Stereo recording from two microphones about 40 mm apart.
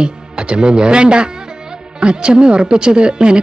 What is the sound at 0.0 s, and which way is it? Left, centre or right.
Speech, right.